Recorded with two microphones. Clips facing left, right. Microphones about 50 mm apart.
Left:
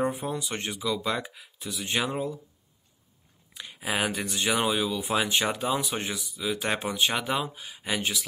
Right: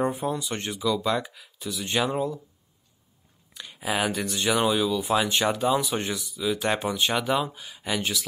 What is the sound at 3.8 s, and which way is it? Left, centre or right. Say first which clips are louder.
Speech: right 2 dB; centre.